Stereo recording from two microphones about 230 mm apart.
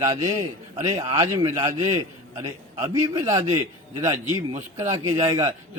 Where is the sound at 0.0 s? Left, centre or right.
Centre.